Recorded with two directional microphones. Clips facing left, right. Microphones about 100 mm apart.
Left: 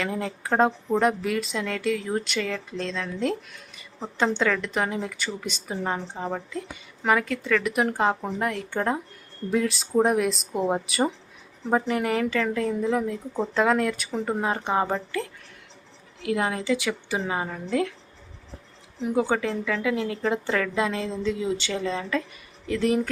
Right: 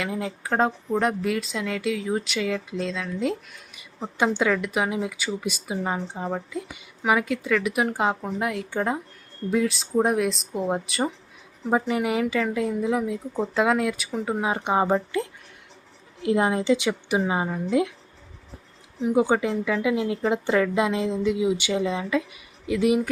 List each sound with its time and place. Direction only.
0.0 s a woman's voice: 5° right (ahead or behind)
19.0 s speech: 15° right (ahead or behind)